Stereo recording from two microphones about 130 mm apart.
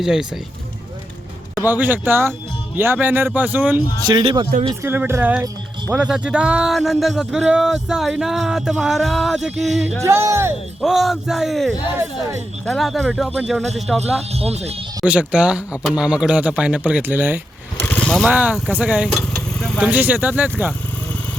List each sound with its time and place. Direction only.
0.0 s speech: 5° right (ahead or behind)
1.6 s speech: 15° right (ahead or behind)
4.0 s speech: 40° right (ahead or behind)
4.7 s speech: 20° right (ahead or behind); by 9.9 s centre (ahead or behind)
10.0 s speech: 20° right (ahead or behind)
10.8 s speech: centre (ahead or behind)
14.0 s speech: 55° right (ahead or behind)
15.0 s speech: 10° right (ahead or behind)
17.7 s vehicle: 10° left (ahead or behind)
18.3 s speech: 10° right (ahead or behind)
19.1 s vehicle: 5° left (ahead or behind)
19.8 s speech: 10° right (ahead or behind)